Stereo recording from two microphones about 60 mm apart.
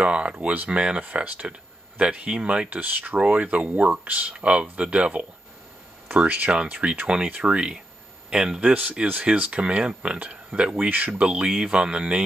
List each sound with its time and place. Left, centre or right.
0.0 s speech: centre
10.9 s speech: right